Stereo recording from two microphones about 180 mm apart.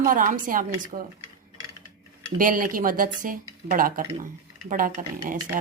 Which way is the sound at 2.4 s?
50° right (ahead or behind).